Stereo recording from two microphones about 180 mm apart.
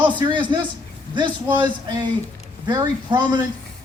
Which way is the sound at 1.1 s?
25° right (ahead or behind).